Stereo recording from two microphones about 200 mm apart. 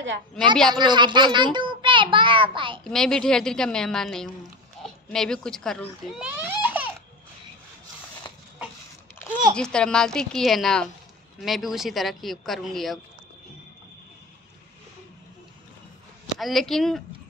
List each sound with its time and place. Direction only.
0.7 s a child's voice: 20° right (ahead or behind)
2.8 s speech: 5° left (ahead or behind)
9.3 s a sound: 40° right (ahead or behind)
9.6 s speech: 5° left (ahead or behind)
16.3 s speech: centre (ahead or behind)